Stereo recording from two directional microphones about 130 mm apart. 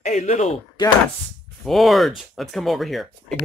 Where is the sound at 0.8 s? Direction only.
35° left (ahead or behind).